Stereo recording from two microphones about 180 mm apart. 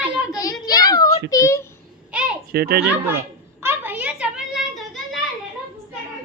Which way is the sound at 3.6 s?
10° right (ahead or behind).